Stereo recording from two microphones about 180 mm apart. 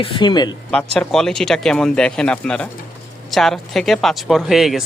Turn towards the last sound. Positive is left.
turn(degrees=0)  # may be behind; listen again after turning